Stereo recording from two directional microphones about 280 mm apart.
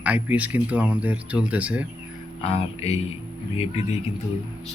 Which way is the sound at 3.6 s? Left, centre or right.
Left.